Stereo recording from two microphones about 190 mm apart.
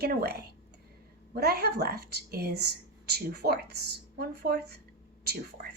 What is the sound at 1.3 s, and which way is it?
A woman's voice, 55° right (ahead or behind).